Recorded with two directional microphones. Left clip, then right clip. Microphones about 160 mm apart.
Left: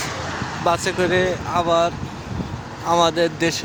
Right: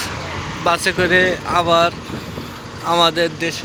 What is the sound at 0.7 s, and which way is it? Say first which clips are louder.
Speech: right 4 dB; 20° left (ahead or behind).